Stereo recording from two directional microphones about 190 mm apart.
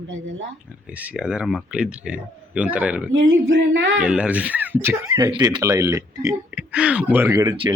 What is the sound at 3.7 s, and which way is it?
Speech, 85° right.